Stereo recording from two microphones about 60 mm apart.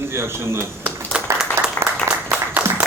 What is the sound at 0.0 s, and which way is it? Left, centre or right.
Speech, right.